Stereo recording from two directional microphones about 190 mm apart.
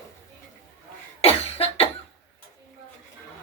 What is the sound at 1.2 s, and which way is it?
Cough, 30° left (ahead or behind).